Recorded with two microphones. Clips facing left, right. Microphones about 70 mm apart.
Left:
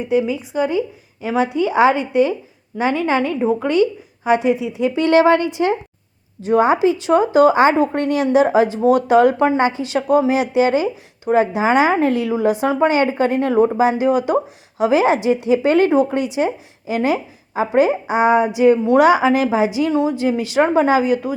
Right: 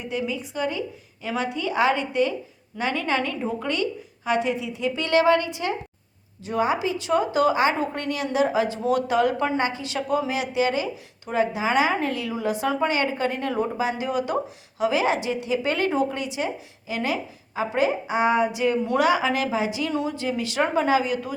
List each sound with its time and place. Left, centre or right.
0.1 s speech: centre
19.9 s a woman's voice: centre
20.1 s speech: left